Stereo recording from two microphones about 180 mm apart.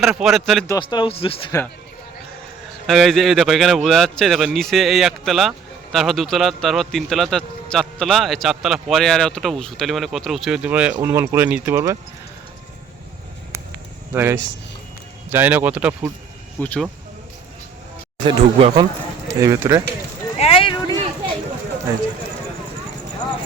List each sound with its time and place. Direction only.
0.0 s speech: centre (ahead or behind)
0.7 s speech: 25° left (ahead or behind)
2.8 s speech: centre (ahead or behind)
14.1 s speech: 10° right (ahead or behind)
16.6 s speech: 10° left (ahead or behind)
18.3 s speech: 25° right (ahead or behind)
20.3 s a sound: 35° left (ahead or behind)